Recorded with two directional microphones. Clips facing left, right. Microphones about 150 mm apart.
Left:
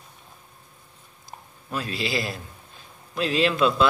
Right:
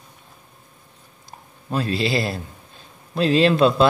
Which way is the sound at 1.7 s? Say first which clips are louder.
Right 6 dB; 30° right (ahead or behind).